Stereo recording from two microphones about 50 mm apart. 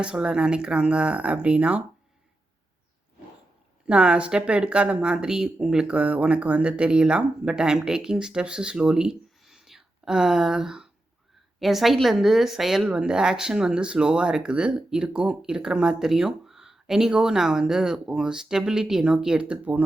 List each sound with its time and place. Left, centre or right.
0.0 s speech: centre
3.8 s speech: right
6.0 s speech: right; by 12.8 s centre
12.9 s speech: centre